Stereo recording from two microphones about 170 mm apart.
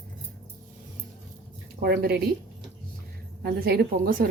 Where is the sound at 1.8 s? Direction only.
70° right (ahead or behind).